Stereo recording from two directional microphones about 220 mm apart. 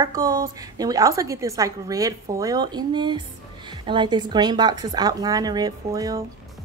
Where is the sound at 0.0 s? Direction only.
15° right (ahead or behind).